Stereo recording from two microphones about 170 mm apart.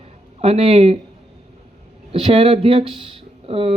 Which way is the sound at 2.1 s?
35° right (ahead or behind).